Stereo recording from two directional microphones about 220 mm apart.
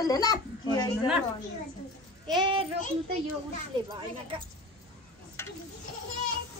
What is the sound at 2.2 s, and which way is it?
Speech, 20° right (ahead or behind).